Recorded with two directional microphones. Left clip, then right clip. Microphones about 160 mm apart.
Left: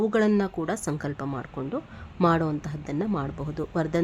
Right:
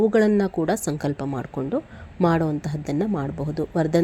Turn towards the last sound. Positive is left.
turn(degrees=-15)  # may be behind; listen again after turning